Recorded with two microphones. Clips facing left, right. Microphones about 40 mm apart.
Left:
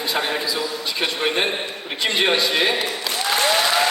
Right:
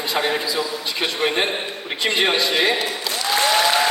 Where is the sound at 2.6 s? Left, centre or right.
Centre.